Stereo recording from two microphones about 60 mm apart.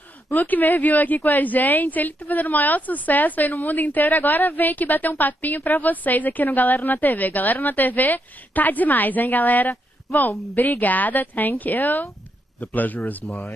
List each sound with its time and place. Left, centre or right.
0.4 s a woman's voice: left